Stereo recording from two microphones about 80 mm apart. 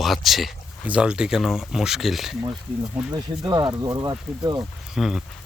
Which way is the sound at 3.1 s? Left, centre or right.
Right.